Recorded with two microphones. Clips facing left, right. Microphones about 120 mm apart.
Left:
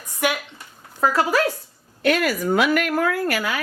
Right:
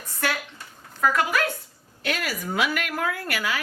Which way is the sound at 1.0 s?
30° left (ahead or behind).